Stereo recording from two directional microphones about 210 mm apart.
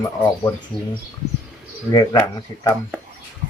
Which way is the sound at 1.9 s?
15° left (ahead or behind).